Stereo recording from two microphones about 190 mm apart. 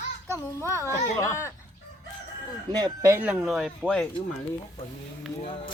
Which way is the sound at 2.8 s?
15° right (ahead or behind).